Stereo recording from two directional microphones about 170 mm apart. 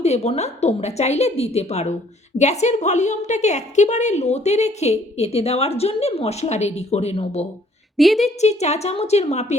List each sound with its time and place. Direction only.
0.0 s a woman's voice: 40° left (ahead or behind)
7.9 s a woman's voice: centre (ahead or behind)
8.4 s a woman's voice: 40° left (ahead or behind)